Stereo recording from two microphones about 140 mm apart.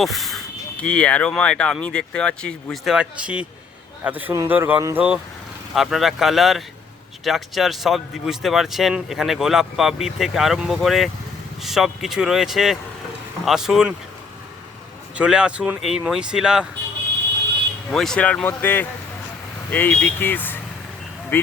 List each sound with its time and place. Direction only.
0.0 s speech: centre (ahead or behind); by 5.0 s 15° right (ahead or behind)
5.7 s speech: centre (ahead or behind)
15.1 s speech: 5° right (ahead or behind)
17.9 s speech: 5° left (ahead or behind)